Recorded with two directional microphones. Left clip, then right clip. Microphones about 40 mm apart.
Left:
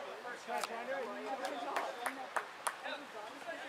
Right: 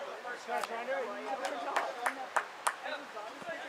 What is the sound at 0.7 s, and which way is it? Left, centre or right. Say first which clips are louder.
Speech: right 4 dB; right.